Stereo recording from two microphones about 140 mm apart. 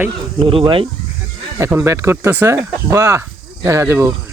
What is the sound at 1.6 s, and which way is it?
Speech, 20° right (ahead or behind).